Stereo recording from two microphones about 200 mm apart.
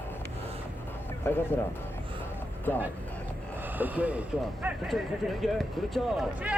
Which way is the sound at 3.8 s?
10° right (ahead or behind).